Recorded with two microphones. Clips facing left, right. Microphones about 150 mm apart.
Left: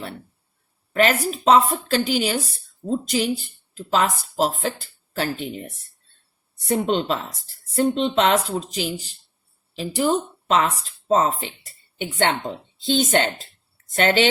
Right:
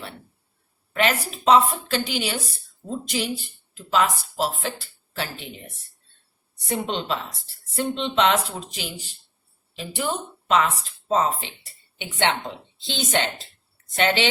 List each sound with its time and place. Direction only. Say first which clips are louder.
0.9 s a woman's voice: left 4 dB; 40° left (ahead or behind)
6.7 s a woman's voice: left 5 dB; 40° left (ahead or behind)